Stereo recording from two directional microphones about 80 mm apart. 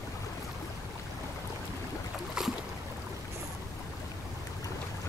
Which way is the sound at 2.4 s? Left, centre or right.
Centre.